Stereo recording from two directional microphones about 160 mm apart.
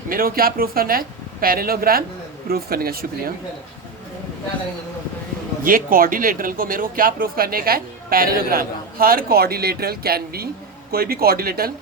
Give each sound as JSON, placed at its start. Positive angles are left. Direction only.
{"t": 0.1, "sound": "speech", "side_deg": -65}
{"t": 5.6, "sound": "speech", "side_deg": -60}